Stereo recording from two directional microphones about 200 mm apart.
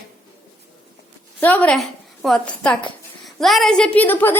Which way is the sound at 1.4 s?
10° left (ahead or behind).